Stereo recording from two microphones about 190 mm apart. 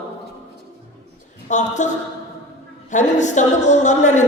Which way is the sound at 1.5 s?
40° left (ahead or behind).